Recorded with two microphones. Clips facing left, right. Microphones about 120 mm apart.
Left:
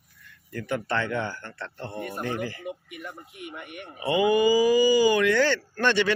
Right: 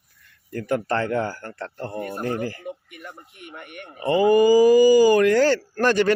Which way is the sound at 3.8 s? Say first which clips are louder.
Right 3 dB; 5° left (ahead or behind).